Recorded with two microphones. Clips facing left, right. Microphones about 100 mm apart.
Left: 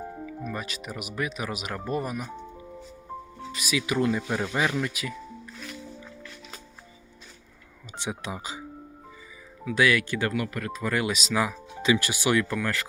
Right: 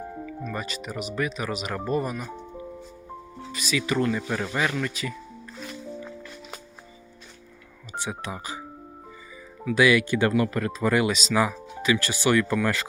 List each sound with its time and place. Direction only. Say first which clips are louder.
0.5 s speech: right 3 dB; centre (ahead or behind)
3.5 s speech: right 1 dB; 5° left (ahead or behind)
7.9 s speech: right 1 dB; 20° left (ahead or behind)
9.6 s speech: right 3 dB; 5° right (ahead or behind); by 10.9 s 25° right (ahead or behind)
10.9 s speech: right 3 dB; centre (ahead or behind)
11.8 s speech: even; 20° left (ahead or behind)